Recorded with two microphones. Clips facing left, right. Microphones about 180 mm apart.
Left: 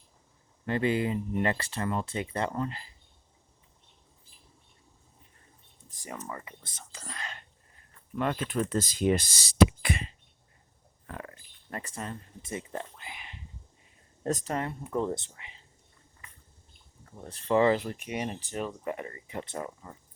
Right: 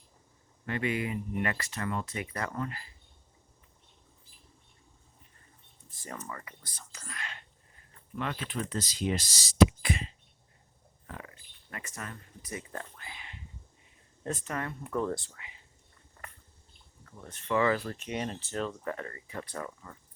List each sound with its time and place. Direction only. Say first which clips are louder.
0.6 s speech: left 5 dB; 30° left (ahead or behind)
5.9 s speech: left 2 dB; 15° left (ahead or behind); by 7.3 s 35° left (ahead or behind)
8.2 s speech: left 6 dB; 45° left (ahead or behind); by 10.2 s 60° left (ahead or behind)
11.7 s speech: left 5 dB; 35° left (ahead or behind)
14.3 s speech: left 5 dB; 40° left (ahead or behind)
14.5 s speech: left 3 dB; 25° left (ahead or behind)
17.1 s speech: left 4 dB; 30° left (ahead or behind)